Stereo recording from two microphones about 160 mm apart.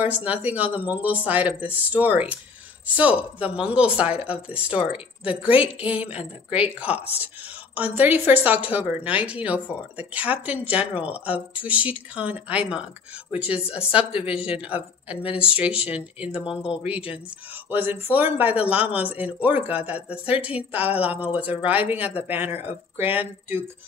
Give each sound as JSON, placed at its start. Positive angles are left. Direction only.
{"t": 0.0, "sound": "speech", "side_deg": -10}
{"t": 3.3, "sound": "speech", "side_deg": -10}
{"t": 20.8, "sound": "speech", "side_deg": 35}
{"t": 21.3, "sound": "speech", "side_deg": -10}